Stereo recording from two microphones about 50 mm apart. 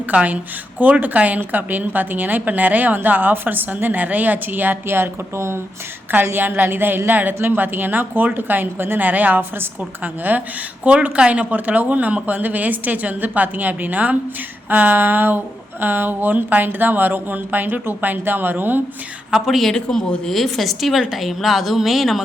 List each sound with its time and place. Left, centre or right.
0.1 s a woman's voice: right
6.3 s a woman's voice: right
14.7 s a sound: right
15.8 s a woman's voice: right
19.3 s a woman's voice: centre
19.7 s a woman's voice: centre